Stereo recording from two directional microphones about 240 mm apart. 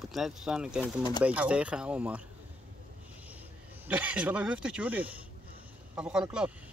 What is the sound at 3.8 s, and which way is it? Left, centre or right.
Speech, centre.